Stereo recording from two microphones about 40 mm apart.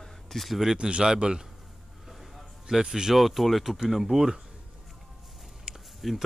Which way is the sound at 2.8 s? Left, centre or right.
Centre.